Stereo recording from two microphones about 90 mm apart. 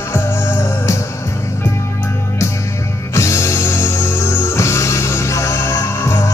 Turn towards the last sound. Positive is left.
turn(degrees=35)  # may be behind; listen again after turning